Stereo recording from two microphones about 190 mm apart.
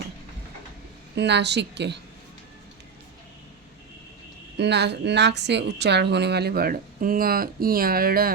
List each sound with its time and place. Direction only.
1.1 s a woman's voice: 65° right (ahead or behind)
4.5 s a woman's voice: 65° right (ahead or behind)